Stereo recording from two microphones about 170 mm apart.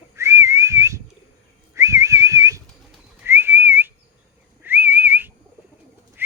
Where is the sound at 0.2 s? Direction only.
15° right (ahead or behind).